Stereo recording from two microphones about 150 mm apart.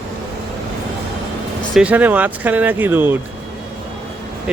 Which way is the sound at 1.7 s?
10° right (ahead or behind).